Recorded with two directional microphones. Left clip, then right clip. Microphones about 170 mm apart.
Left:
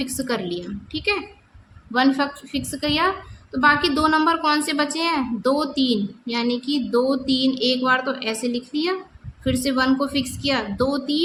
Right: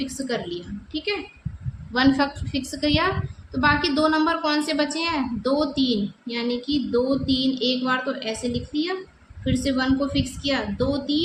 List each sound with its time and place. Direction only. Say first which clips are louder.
0.0 s a woman's voice: left 2 dB; 40° left (ahead or behind)
1.9 s a woman's voice: left 1 dB; 20° left (ahead or behind); by 11.2 s 35° left (ahead or behind)